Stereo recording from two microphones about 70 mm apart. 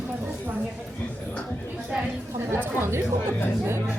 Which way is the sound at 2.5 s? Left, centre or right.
Right.